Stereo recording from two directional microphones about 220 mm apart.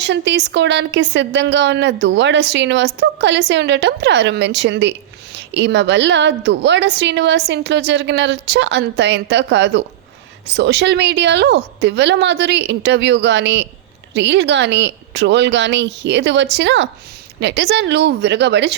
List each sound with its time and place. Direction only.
0.0 s a woman's voice: 50° right (ahead or behind)